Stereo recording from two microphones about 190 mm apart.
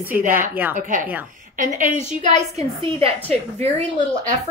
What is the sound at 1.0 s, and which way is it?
Speech, 10° right (ahead or behind).